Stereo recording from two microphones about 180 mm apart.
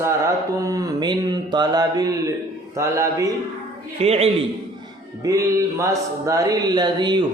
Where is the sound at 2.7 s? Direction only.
15° right (ahead or behind).